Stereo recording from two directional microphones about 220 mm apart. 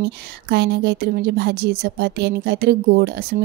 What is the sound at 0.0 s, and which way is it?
A woman's voice, 50° right (ahead or behind).